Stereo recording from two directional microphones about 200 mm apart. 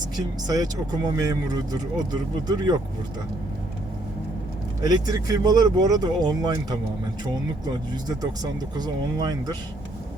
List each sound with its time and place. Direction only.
0.2 s speech: 20° right (ahead or behind)
4.8 s speech: 20° right (ahead or behind)